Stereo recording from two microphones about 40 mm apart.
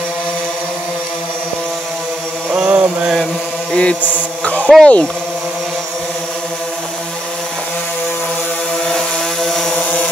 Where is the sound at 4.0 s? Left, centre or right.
Left.